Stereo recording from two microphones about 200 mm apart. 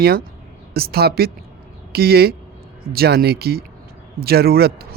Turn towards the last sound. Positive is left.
turn(degrees=-50)  # may be behind; listen again after turning